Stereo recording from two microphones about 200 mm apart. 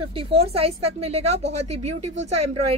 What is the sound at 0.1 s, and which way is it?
A woman's voice, 30° right (ahead or behind).